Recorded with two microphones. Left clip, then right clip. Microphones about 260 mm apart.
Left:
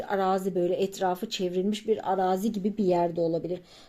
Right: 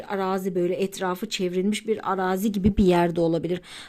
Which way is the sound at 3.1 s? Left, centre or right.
Right.